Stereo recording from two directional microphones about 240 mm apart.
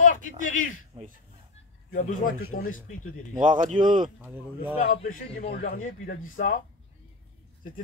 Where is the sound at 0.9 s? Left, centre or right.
Right.